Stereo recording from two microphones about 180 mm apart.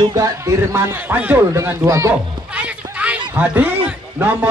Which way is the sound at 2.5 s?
5° right (ahead or behind).